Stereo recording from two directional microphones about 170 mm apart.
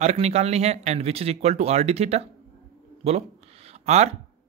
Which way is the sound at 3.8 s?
40° right (ahead or behind).